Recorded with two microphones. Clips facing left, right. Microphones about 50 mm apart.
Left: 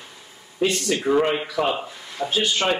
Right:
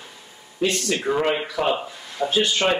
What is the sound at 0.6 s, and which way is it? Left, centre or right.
Speech, centre.